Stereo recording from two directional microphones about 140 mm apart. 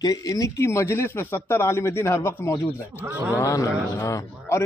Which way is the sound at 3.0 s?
10° right (ahead or behind).